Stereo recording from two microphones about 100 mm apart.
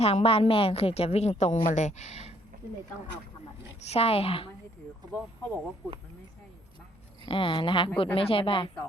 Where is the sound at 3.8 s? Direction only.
90° left; by 4.4 s 75° left (ahead or behind).